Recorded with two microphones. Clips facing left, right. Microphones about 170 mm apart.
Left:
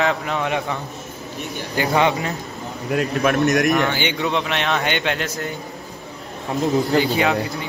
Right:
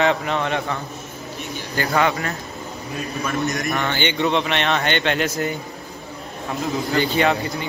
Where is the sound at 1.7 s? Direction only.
20° left (ahead or behind).